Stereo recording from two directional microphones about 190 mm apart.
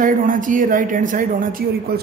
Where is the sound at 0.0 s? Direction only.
45° right (ahead or behind).